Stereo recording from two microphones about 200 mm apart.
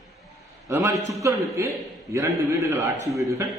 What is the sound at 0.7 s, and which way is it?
A man's voice, 15° right (ahead or behind).